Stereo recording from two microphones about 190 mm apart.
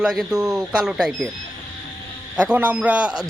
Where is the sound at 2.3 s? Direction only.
5° right (ahead or behind).